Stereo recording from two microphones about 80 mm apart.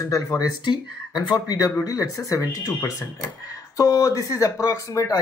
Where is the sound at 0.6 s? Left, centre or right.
Left.